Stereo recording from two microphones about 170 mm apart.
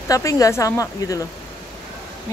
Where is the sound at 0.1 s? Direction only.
20° left (ahead or behind).